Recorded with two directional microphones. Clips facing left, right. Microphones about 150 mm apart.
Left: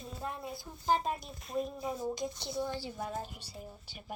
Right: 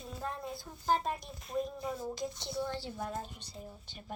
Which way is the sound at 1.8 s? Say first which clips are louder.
Left 2 dB; 20° left (ahead or behind).